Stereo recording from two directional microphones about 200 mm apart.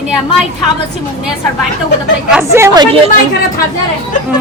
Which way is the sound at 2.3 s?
15° right (ahead or behind).